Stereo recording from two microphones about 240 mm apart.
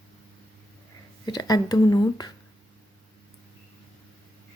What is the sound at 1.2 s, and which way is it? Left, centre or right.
Speech, centre.